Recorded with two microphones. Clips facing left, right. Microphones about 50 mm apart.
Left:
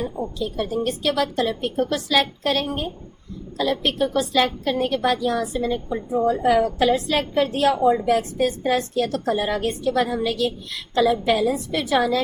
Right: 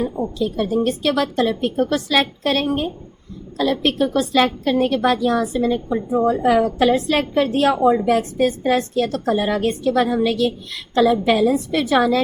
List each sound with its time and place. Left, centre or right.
0.5 s a woman's voice: right